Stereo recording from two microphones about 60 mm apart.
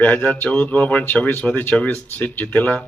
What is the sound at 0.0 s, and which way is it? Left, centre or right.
Speech, left.